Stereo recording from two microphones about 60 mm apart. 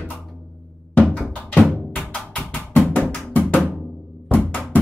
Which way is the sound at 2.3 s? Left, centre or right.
Left.